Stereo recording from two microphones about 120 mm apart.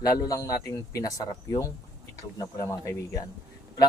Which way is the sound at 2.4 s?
25° left (ahead or behind).